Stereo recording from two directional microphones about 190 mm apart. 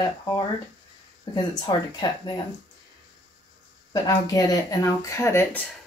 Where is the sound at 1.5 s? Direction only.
20° left (ahead or behind).